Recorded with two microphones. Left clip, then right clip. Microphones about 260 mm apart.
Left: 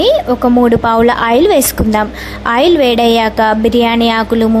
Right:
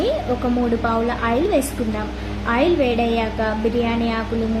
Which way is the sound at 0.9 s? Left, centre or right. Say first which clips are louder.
Left 11 dB; left.